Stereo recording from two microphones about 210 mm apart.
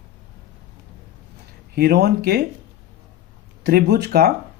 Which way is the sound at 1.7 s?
50° right (ahead or behind).